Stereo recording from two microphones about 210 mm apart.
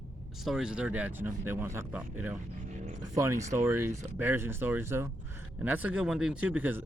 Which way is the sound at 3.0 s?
15° right (ahead or behind).